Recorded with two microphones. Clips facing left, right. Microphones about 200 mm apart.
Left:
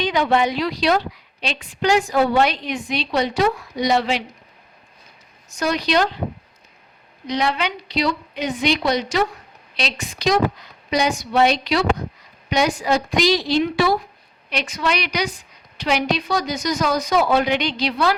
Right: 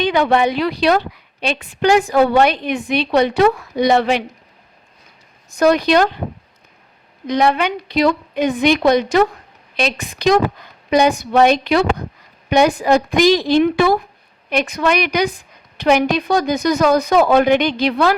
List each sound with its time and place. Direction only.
0.0 s a woman's voice: 60° right (ahead or behind)
5.5 s a woman's voice: 55° right (ahead or behind)
7.3 s a woman's voice: 50° right (ahead or behind)